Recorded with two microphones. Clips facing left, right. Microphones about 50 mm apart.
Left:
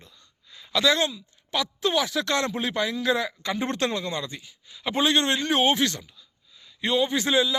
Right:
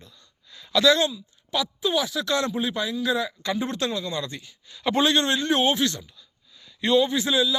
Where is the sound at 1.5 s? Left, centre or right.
Left.